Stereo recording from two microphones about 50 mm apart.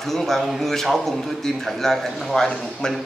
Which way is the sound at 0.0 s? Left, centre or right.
Centre.